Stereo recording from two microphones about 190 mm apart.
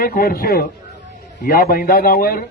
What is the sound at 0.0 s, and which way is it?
A man's voice, 50° left (ahead or behind).